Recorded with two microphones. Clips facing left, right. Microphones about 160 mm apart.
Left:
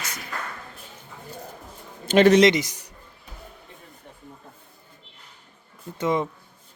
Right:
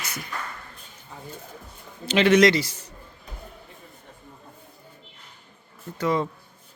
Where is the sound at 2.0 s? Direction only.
45° left (ahead or behind).